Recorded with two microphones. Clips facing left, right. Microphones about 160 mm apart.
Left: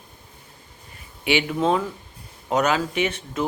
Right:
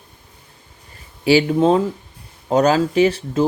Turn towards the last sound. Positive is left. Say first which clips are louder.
# right 9 dB
turn(degrees=-30)  # may be behind; listen again after turning